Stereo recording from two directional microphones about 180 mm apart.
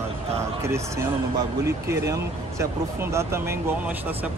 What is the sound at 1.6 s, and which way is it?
Speech, 15° right (ahead or behind).